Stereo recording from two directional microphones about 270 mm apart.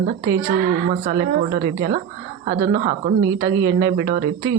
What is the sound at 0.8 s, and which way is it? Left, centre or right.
Speech, right.